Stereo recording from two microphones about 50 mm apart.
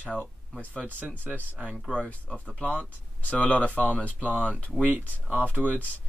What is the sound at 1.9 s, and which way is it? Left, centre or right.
Speech, left.